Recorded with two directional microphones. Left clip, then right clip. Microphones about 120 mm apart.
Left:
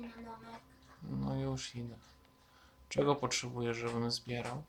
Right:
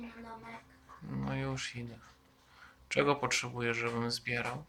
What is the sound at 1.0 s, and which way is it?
Speech, 35° left (ahead or behind).